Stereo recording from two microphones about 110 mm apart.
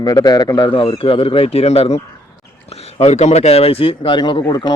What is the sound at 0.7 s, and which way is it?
Speech, 60° left (ahead or behind).